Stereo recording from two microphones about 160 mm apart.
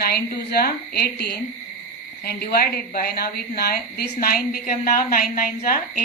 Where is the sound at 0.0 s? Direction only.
75° left (ahead or behind).